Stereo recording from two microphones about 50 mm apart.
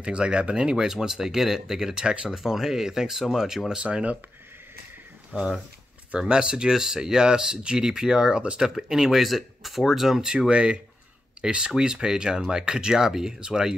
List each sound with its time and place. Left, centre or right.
0.0 s speech: right
3.8 s speech: right
5.3 s speech: right; by 10.3 s centre
10.5 s speech: right